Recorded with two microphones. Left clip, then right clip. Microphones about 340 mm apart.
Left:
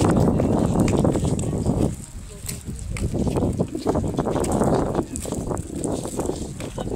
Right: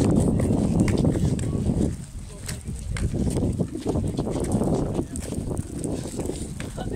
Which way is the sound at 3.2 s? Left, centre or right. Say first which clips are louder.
Left 4 dB; left.